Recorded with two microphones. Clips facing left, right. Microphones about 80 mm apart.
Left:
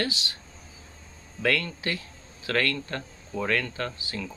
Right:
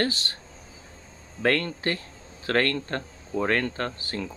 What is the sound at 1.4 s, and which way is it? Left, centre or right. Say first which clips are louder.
A man's voice: right 3 dB; right.